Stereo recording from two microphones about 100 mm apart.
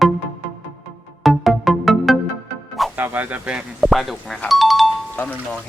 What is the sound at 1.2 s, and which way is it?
Music, centre (ahead or behind).